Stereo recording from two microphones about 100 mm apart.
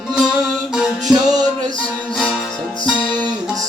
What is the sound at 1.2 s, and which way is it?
Music, 40° right (ahead or behind).